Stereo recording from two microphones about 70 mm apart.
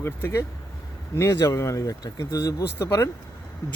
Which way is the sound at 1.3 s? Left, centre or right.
Left.